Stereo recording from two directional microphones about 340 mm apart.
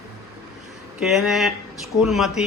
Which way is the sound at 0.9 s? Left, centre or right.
Centre.